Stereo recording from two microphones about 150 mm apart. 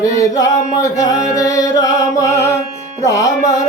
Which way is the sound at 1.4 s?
20° left (ahead or behind).